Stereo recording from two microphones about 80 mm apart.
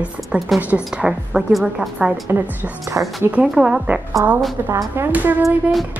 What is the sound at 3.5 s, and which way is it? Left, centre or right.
Speech, centre.